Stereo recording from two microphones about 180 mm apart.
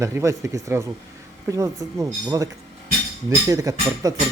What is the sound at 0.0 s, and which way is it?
Speech, 15° right (ahead or behind).